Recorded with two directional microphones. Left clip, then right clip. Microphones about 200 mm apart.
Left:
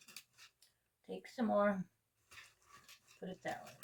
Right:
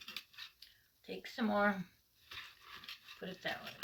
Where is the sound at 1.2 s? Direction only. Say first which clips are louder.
Even; 10° right (ahead or behind).